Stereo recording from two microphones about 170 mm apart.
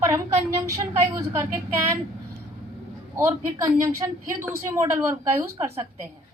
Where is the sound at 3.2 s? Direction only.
15° right (ahead or behind).